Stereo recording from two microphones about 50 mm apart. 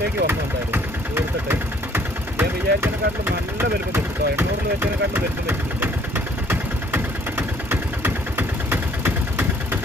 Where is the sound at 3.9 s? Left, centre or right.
Right.